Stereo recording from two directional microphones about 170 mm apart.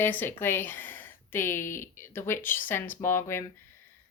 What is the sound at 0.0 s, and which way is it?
Speech, 10° left (ahead or behind).